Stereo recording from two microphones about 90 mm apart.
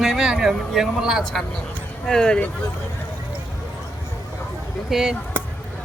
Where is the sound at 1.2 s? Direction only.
5° left (ahead or behind).